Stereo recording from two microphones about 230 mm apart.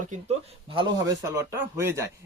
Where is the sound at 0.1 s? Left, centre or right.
Right.